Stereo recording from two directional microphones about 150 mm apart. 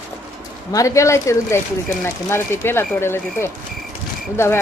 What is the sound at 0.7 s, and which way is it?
Speech, 20° left (ahead or behind).